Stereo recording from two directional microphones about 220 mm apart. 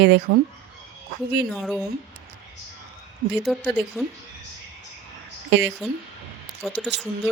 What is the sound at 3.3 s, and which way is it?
Speech, centre (ahead or behind).